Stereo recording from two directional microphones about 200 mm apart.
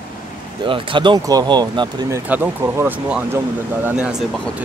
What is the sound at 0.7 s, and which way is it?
Speech, 25° right (ahead or behind).